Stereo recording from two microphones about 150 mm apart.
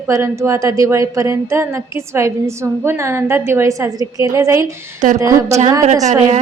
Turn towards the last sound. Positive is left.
turn(degrees=-50)  # may be behind; listen again after turning